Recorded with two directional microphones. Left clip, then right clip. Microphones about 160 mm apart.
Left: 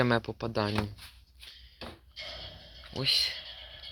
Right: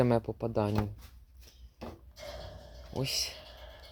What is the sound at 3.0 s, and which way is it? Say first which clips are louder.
Speech: left 7 dB; 15° right (ahead or behind).